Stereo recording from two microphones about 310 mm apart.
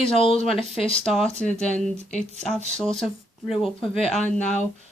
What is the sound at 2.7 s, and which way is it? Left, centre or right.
Speech, centre.